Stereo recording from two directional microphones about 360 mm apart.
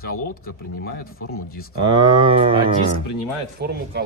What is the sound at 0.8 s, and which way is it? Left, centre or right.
Speech, left.